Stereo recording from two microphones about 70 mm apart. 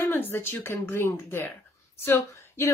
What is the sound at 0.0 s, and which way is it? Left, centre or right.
A woman's voice, left.